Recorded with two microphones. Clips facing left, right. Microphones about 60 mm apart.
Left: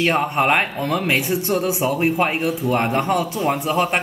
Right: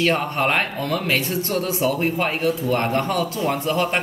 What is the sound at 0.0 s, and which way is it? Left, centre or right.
Speech, centre.